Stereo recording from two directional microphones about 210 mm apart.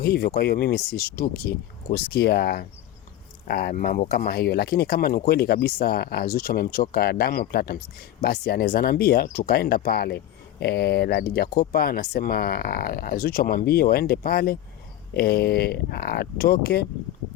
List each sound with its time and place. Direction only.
0.0 s speech: 50° left (ahead or behind)